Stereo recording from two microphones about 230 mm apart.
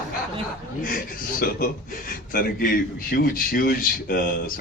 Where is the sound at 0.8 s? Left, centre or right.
Left.